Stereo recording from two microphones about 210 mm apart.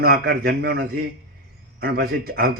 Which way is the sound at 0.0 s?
50° right (ahead or behind).